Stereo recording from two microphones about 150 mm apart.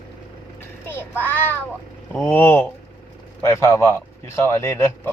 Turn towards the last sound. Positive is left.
turn(degrees=20)  # may be behind; listen again after turning